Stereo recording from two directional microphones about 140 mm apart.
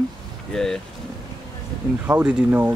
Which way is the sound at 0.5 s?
5° left (ahead or behind).